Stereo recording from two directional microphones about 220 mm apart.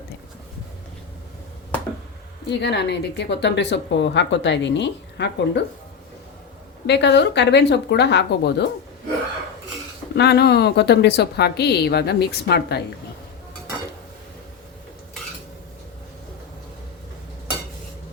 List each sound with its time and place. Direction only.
2.5 s a woman's voice: 50° left (ahead or behind)
6.8 s a woman's voice: 50° left (ahead or behind)
10.2 s a woman's voice: 50° left (ahead or behind)